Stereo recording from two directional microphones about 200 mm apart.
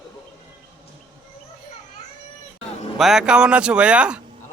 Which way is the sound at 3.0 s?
Centre (ahead or behind).